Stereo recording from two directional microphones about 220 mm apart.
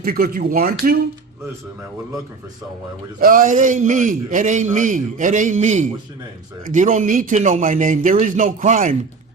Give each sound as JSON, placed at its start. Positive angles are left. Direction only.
{"t": 0.0, "sound": "speech", "side_deg": -40}
{"t": 3.2, "sound": "a man's voice", "side_deg": -40}